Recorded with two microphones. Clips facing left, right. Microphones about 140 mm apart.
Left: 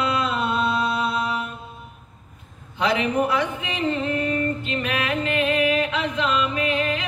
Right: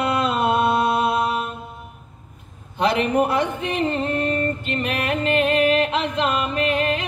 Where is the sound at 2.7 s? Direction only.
50° right (ahead or behind).